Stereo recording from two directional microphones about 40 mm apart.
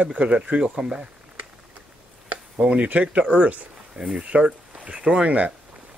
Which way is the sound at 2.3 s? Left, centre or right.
Right.